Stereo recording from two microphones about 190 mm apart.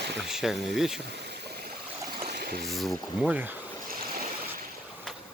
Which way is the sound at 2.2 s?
55° right (ahead or behind).